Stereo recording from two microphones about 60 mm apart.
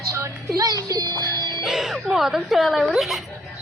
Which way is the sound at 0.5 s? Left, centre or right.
Right.